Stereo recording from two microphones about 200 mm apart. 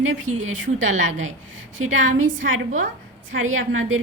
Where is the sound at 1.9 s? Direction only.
80° right.